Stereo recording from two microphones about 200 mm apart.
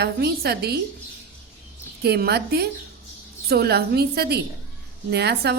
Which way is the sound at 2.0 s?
55° right (ahead or behind).